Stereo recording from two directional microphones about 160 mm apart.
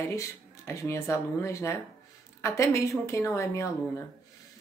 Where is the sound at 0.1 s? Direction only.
20° left (ahead or behind).